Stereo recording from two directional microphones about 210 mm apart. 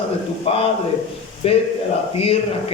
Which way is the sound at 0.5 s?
30° left (ahead or behind).